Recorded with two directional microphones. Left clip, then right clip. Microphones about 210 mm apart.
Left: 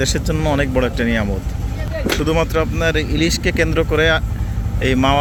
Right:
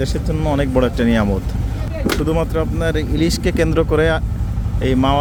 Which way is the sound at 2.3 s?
10° right (ahead or behind).